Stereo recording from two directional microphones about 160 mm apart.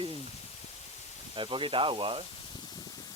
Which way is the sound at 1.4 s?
30° right (ahead or behind).